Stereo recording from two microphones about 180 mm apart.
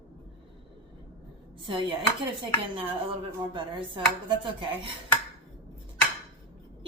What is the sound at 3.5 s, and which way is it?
Speech, 25° right (ahead or behind).